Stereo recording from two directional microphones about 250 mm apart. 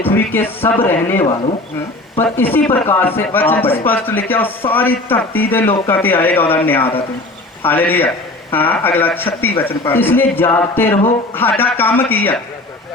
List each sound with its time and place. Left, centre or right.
0.0 s a man's voice: centre
5.6 s speech: left
5.9 s a man's voice: centre